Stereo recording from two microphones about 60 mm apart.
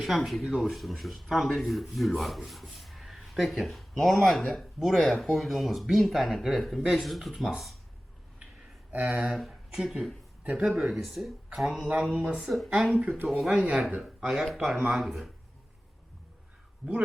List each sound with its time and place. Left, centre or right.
0.0 s speech: centre
8.9 s speech: right
9.2 s speech: centre
10.4 s speech: centre
10.9 s speech: centre
12.5 s speech: centre
13.6 s speech: right
14.4 s speech: centre
16.8 s speech: right